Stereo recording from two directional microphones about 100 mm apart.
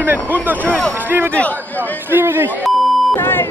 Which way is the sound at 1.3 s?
15° left (ahead or behind).